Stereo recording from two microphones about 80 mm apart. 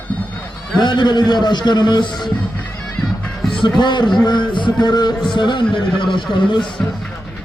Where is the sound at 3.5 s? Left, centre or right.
Left.